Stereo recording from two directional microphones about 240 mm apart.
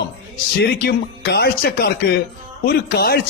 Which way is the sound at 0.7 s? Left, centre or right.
Left.